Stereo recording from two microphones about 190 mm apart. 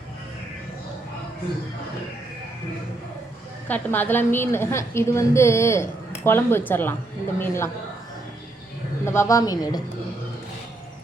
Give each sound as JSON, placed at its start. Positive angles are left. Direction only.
{"t": 3.7, "sound": "a woman's voice", "side_deg": 10}
{"t": 9.0, "sound": "a woman's voice", "side_deg": 15}